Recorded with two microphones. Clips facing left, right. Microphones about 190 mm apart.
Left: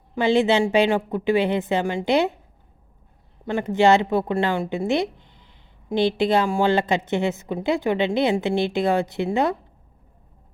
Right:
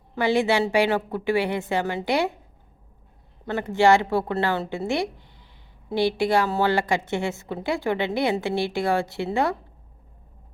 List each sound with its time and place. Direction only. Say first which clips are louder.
0.2 s a woman's voice: left 3 dB; 20° left (ahead or behind)
3.4 s a woman's voice: left 1 dB; 15° left (ahead or behind)